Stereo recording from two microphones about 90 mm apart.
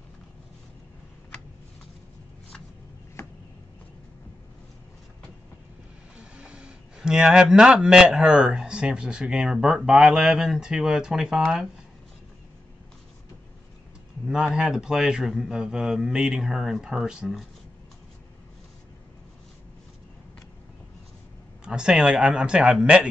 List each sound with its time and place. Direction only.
3.2 s a sound: 30° left (ahead or behind)
6.1 s speech: 10° right (ahead or behind)
14.2 s speech: 10° right (ahead or behind)
21.6 s speech: 10° right (ahead or behind)